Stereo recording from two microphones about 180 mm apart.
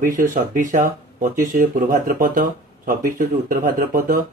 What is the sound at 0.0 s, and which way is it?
Speech, 45° right (ahead or behind).